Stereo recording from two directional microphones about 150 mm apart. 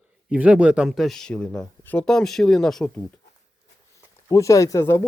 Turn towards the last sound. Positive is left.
turn(degrees=20)  # may be behind; listen again after turning